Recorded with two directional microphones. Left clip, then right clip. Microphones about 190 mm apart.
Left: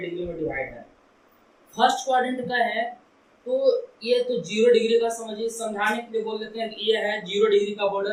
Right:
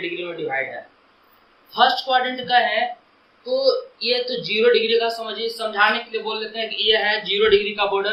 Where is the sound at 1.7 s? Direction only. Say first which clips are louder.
Right 3 dB; 20° right (ahead or behind).